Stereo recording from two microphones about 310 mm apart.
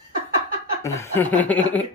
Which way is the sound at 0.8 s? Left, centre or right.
Centre.